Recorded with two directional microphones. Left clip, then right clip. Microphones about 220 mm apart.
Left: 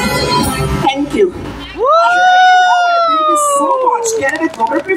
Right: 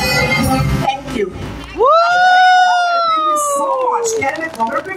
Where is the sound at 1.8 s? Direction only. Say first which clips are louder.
Left 1 dB; centre (ahead or behind).